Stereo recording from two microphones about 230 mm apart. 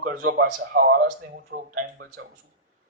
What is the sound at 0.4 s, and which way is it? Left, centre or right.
Speech, right.